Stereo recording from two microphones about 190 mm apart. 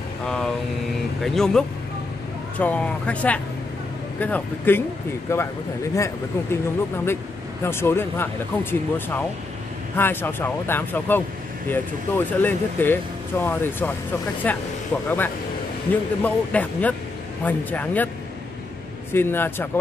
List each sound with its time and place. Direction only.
1.2 s speech: centre (ahead or behind)
7.6 s speech: 10° left (ahead or behind)
19.1 s speech: 10° left (ahead or behind)